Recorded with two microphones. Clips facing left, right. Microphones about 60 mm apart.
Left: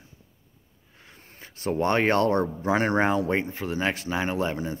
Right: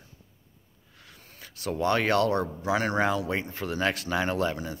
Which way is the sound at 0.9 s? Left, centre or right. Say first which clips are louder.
Left 1 dB; left.